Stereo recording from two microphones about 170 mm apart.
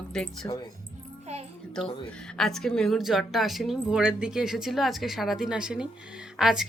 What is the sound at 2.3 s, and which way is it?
A woman's voice, 5° left (ahead or behind).